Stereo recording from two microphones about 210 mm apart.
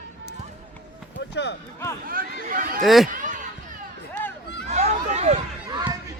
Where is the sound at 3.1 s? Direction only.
40° right (ahead or behind).